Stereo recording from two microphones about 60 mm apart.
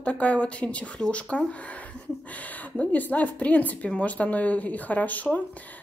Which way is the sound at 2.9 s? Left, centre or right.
Left.